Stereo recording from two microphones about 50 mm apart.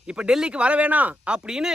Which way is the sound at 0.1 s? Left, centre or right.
Centre.